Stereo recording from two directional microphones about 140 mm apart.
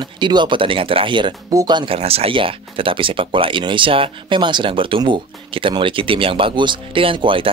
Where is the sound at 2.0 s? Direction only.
45° right (ahead or behind).